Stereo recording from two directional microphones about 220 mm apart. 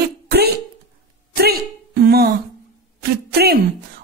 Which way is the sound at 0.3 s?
45° right (ahead or behind).